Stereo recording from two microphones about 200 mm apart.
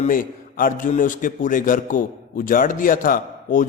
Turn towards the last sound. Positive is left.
turn(degrees=45)  # may be behind; listen again after turning